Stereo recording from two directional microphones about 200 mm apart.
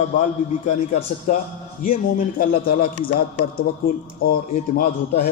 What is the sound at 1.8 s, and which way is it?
A man's voice, 40° left (ahead or behind).